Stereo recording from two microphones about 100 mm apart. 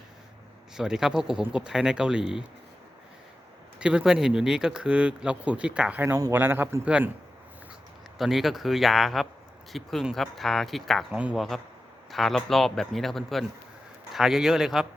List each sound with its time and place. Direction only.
0.8 s speech: 5° right (ahead or behind)
3.8 s speech: 10° right (ahead or behind)
6.8 s speech: 10° right (ahead or behind)
8.2 s speech: centre (ahead or behind)